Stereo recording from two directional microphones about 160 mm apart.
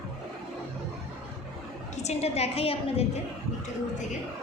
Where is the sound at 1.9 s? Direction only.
45° left (ahead or behind).